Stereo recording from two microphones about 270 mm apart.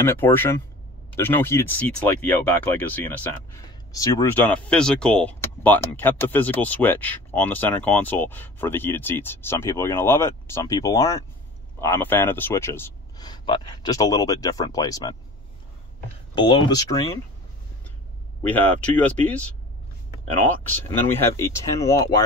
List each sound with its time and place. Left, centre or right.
0.0 s speech: centre
16.3 s speech: centre
18.5 s speech: centre
21.1 s speech: centre